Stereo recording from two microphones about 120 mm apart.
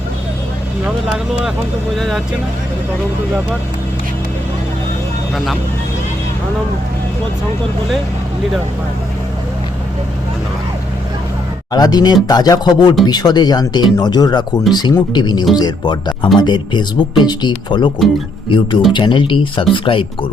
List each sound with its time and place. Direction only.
2.0 s speech: centre (ahead or behind)
11.7 s speech: 35° left (ahead or behind)